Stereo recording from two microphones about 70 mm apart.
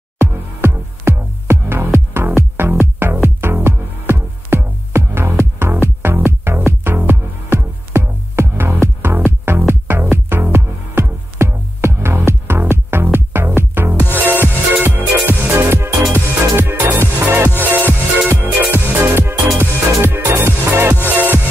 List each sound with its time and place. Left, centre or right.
0.2 s music: right